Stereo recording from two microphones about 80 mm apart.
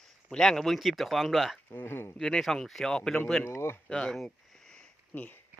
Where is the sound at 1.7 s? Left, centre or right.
Left.